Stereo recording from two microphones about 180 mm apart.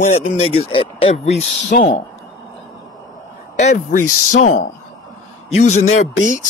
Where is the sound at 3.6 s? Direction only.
45° left (ahead or behind).